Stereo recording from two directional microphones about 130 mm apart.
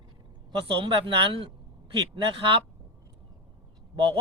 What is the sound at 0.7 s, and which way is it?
Speech, 40° right (ahead or behind).